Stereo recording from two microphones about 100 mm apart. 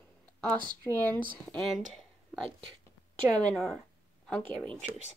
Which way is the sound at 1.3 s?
Centre (ahead or behind).